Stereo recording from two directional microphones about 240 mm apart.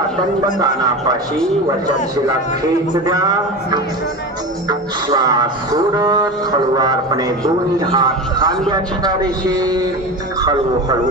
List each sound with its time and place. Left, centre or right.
2.9 s a man's voice: centre